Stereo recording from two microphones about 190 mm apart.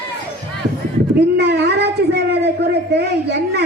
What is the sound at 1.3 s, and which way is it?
A woman's voice, 60° right (ahead or behind).